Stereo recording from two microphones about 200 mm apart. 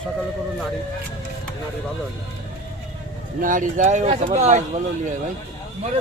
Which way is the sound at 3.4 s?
40° right (ahead or behind).